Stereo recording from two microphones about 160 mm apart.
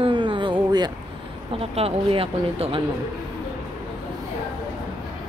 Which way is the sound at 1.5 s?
35° right (ahead or behind).